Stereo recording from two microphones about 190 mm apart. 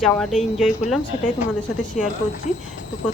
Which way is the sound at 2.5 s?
40° left (ahead or behind).